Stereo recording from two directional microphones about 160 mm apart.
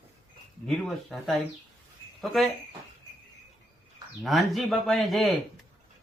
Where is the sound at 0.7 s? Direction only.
Centre (ahead or behind).